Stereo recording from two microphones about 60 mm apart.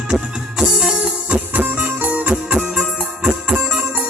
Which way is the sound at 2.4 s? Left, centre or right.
Centre.